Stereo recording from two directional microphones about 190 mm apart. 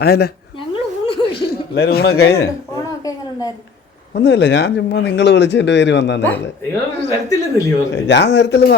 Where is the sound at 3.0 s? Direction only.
20° left (ahead or behind).